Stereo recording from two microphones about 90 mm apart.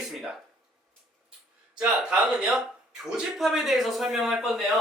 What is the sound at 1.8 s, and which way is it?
Speech, 10° right (ahead or behind).